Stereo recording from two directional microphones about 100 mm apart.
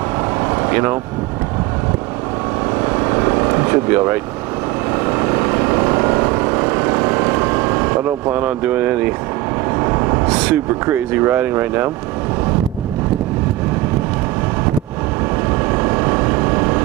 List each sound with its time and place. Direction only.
0.4 s vehicle: 25° right (ahead or behind)
2.8 s vehicle: 25° right (ahead or behind)
9.8 s vehicle: 25° right (ahead or behind)
10.2 s speech: 10° right (ahead or behind)
15.6 s vehicle: 25° right (ahead or behind)